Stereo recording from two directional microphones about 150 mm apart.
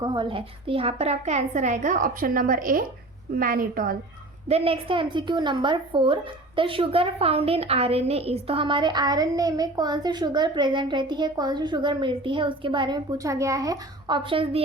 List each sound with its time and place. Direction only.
0.0 s a woman's voice: 30° right (ahead or behind); by 3.9 s 70° right (ahead or behind)
4.4 s a woman's voice: 40° right (ahead or behind); by 14.2 s 25° right (ahead or behind)
14.3 s a woman's voice: 35° right (ahead or behind)